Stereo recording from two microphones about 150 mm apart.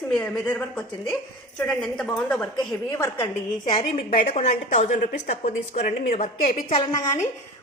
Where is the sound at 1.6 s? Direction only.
5° left (ahead or behind).